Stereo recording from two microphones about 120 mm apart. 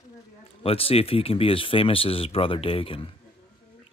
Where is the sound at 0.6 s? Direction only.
50° left (ahead or behind).